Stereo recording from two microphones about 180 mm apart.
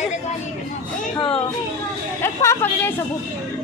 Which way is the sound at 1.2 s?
30° left (ahead or behind).